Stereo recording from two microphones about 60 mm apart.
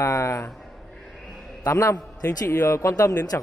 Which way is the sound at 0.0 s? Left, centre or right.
Left.